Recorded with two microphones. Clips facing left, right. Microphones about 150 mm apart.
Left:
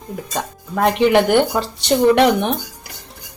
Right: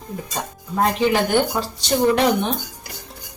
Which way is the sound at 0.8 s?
65° left (ahead or behind).